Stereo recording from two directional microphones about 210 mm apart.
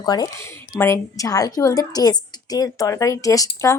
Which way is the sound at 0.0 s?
15° left (ahead or behind).